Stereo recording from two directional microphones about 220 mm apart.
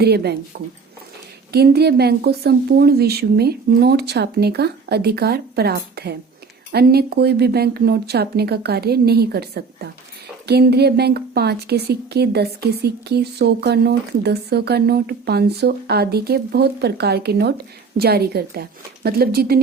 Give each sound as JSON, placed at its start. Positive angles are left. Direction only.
{"t": 0.0, "sound": "a woman's voice", "side_deg": -45}